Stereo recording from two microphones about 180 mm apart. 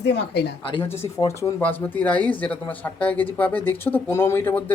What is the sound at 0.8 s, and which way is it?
Speech, 15° left (ahead or behind).